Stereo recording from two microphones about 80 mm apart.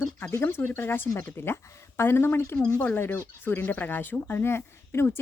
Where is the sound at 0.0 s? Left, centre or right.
Left.